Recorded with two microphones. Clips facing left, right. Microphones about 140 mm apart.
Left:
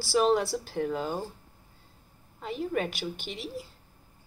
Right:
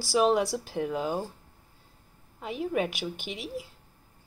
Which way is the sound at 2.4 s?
5° right (ahead or behind).